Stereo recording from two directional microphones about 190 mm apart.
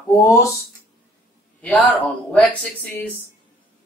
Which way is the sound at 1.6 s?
5° left (ahead or behind).